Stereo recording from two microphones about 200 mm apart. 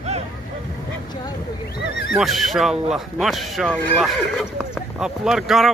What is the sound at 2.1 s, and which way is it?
Speech, centre (ahead or behind).